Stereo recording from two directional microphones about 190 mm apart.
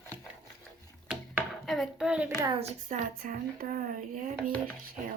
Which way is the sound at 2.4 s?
35° right (ahead or behind).